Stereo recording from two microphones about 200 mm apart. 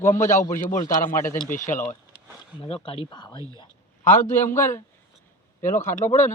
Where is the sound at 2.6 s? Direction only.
30° left (ahead or behind).